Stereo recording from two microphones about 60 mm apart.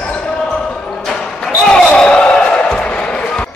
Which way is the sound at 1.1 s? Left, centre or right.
Centre.